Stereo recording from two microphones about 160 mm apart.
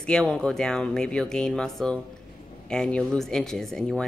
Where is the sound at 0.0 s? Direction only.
5° left (ahead or behind).